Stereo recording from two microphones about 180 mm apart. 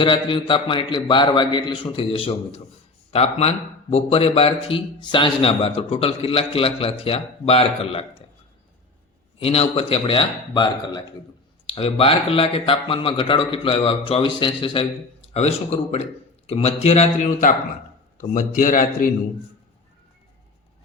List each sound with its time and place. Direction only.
0.0 s a man's voice: 25° left (ahead or behind)
9.4 s a man's voice: 35° left (ahead or behind)